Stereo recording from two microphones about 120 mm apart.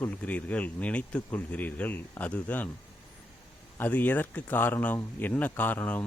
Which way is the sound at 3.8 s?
15° left (ahead or behind).